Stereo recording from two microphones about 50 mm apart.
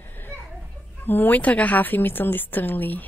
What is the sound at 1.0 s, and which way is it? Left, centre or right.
A woman's voice, left.